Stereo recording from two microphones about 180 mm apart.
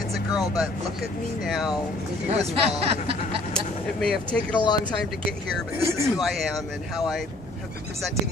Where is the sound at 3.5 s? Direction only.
Centre (ahead or behind).